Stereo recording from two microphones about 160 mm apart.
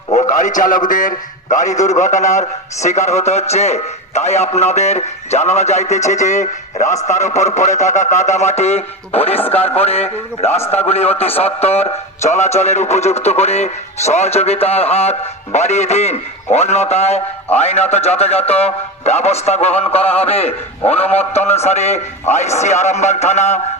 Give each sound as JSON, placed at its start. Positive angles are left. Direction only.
{"t": 0.1, "sound": "a man's voice", "side_deg": 50}